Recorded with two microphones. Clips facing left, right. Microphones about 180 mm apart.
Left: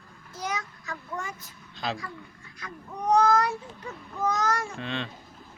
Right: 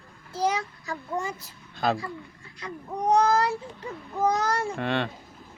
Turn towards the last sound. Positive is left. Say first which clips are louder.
# right 6 dB
turn(degrees=-60)  # may be behind; listen again after turning